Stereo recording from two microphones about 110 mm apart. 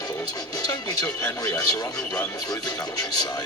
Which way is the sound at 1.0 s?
10° left (ahead or behind).